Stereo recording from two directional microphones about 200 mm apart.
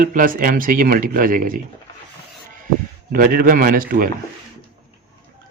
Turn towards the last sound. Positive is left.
turn(degrees=-45)  # may be behind; listen again after turning